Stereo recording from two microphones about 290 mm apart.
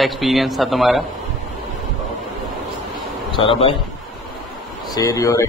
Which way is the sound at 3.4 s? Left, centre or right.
Centre.